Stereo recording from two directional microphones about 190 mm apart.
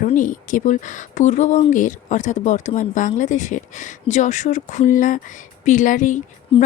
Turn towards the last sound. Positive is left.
turn(degrees=40)  # may be behind; listen again after turning